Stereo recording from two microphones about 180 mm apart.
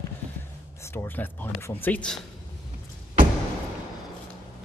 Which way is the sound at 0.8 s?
10° left (ahead or behind).